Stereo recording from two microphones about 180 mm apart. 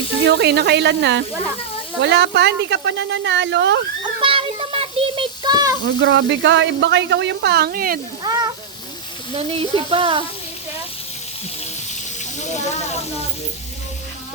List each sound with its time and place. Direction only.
0.3 s speech: 65° right (ahead or behind); by 3.8 s 80° right
4.2 s child singing: 30° right (ahead or behind)
5.8 s speech: 80° right; by 7.9 s 55° right (ahead or behind)
8.2 s speech: 20° right (ahead or behind)
9.3 s speech: 30° right (ahead or behind)